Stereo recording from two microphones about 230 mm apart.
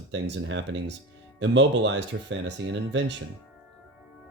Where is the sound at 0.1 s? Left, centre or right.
Right.